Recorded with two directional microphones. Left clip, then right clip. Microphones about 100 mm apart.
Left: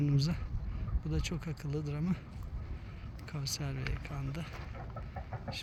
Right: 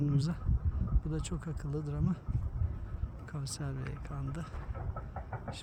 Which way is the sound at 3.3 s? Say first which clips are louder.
Left 3 dB; 20° right (ahead or behind).